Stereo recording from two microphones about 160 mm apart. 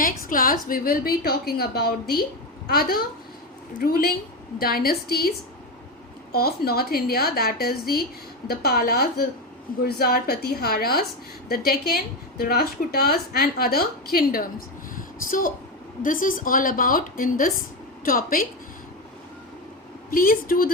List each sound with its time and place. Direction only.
0.0 s a woman's voice: 60° left (ahead or behind)
14.9 s a sound: 60° left (ahead or behind)
16.0 s a woman's voice: 60° left (ahead or behind)
20.1 s a woman's voice: 65° left (ahead or behind)